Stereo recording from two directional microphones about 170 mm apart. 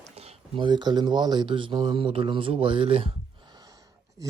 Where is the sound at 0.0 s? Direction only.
40° right (ahead or behind).